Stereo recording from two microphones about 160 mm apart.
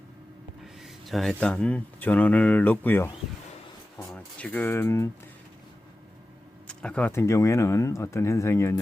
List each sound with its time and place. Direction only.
0.6 s speech: centre (ahead or behind); by 5.0 s 15° left (ahead or behind)
6.7 s speech: 5° left (ahead or behind)